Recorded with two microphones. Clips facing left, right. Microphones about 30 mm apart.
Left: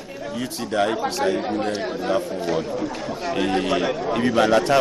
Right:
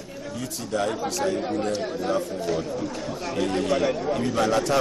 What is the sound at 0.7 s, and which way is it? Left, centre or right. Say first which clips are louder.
Speech: left 4 dB; left.